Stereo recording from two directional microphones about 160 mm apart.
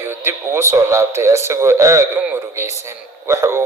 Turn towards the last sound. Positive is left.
turn(degrees=-15)  # may be behind; listen again after turning